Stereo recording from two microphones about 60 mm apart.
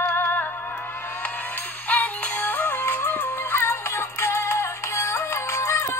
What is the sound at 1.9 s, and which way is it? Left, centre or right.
Music, left.